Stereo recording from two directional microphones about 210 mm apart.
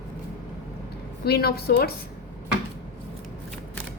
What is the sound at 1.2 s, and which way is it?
Speech, 50° left (ahead or behind).